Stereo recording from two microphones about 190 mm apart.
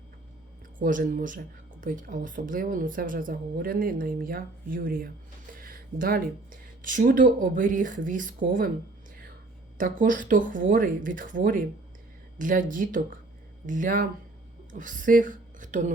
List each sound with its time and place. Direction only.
0.8 s speech: 45° right (ahead or behind)
9.7 s a woman's voice: 45° right (ahead or behind)